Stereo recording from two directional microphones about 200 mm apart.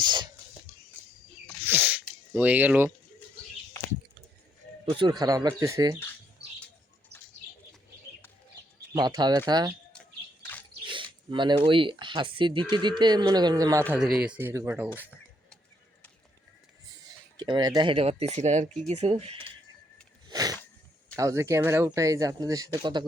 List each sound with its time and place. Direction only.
0.0 s whispering: 20° right (ahead or behind)
1.6 s sneeze: 10° right (ahead or behind)
2.3 s speech: 10° right (ahead or behind)
4.9 s speech: 25° right (ahead or behind)
6.4 s bird: 55° right (ahead or behind)
8.9 s speech: 20° right (ahead or behind)
10.8 s speech: 25° right (ahead or behind)
13.9 s speech: 5° right (ahead or behind)
17.0 s speech: 20° right (ahead or behind)
20.2 s a sound: 20° right (ahead or behind)
21.2 s speech: 15° right (ahead or behind)